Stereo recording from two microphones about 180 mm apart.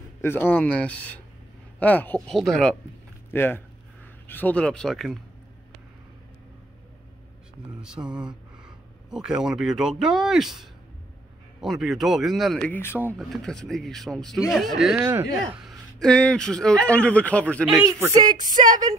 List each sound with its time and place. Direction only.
0.2 s speech: 10° left (ahead or behind)
7.8 s speech: 5° right (ahead or behind); by 13.1 s 10° left (ahead or behind)
13.2 s speech: centre (ahead or behind)
15.0 s speech: 10° right (ahead or behind)
15.6 s speech: 5° left (ahead or behind)
17.8 s speech: 15° right (ahead or behind)
18.4 s speech: 45° right (ahead or behind)